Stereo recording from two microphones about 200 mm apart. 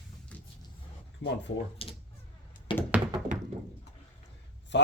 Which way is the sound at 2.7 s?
25° left (ahead or behind).